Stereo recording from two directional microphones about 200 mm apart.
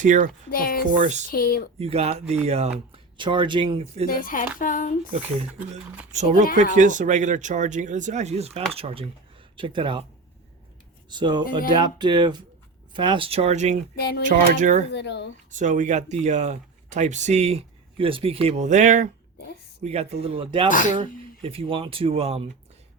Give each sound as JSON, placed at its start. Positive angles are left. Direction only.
{"t": 0.0, "sound": "speech", "side_deg": -40}
{"t": 0.5, "sound": "a sound", "side_deg": 45}
{"t": 0.9, "sound": "speech", "side_deg": -40}
{"t": 1.3, "sound": "speech", "side_deg": 50}
{"t": 1.8, "sound": "speech", "side_deg": -30}
{"t": 4.1, "sound": "speech", "side_deg": 45}
{"t": 6.1, "sound": "speech", "side_deg": -35}
{"t": 11.1, "sound": "speech", "side_deg": -20}
{"t": 13.9, "sound": "speech", "side_deg": 55}
{"t": 14.3, "sound": "speech", "side_deg": -40}
{"t": 14.8, "sound": "speech", "side_deg": 60}
{"t": 15.4, "sound": "speech", "side_deg": -40}
{"t": 20.7, "sound": "speech", "side_deg": 40}
{"t": 21.0, "sound": "speech", "side_deg": -25}